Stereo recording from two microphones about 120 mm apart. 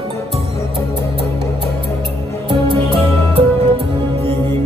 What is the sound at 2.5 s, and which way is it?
Music, 45° right (ahead or behind).